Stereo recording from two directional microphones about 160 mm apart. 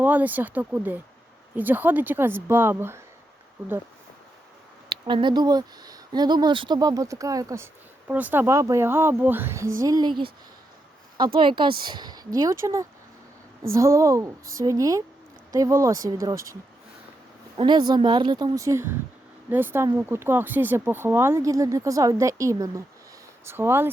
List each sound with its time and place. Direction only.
0.0 s speech: 10° right (ahead or behind)
4.9 s speech: 30° right (ahead or behind)
11.3 s a woman's voice: 30° right (ahead or behind)
17.6 s speech: 30° right (ahead or behind)